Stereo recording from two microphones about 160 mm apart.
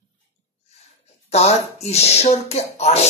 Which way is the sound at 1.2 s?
40° left (ahead or behind).